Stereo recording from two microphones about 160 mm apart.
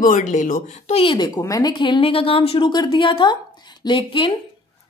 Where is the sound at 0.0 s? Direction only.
55° left (ahead or behind); by 4.3 s 30° left (ahead or behind).